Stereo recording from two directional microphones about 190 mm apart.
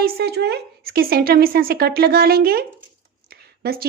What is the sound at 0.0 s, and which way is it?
A woman's voice, 55° right (ahead or behind).